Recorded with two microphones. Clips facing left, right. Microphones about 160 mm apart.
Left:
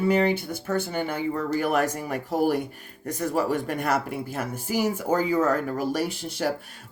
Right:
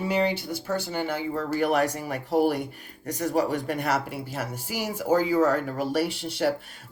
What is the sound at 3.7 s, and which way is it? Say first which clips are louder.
Speech: left 1 dB; 45° left (ahead or behind).